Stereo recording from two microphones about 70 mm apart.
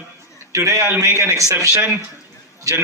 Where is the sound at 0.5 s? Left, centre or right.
Right.